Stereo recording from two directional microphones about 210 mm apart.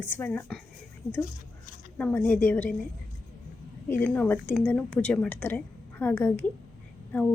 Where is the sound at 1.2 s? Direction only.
40° left (ahead or behind).